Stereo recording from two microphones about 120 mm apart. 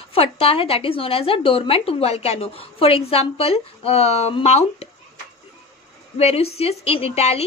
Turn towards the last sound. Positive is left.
turn(degrees=60)  # may be behind; listen again after turning